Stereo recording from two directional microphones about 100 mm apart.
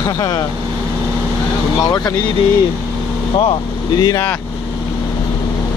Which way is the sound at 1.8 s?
40° left (ahead or behind).